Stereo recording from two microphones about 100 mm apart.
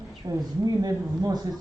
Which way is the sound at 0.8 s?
40° right (ahead or behind).